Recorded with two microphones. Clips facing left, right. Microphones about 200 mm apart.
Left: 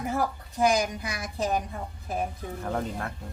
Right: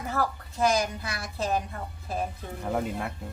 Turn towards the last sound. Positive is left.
turn(degrees=-10)  # may be behind; listen again after turning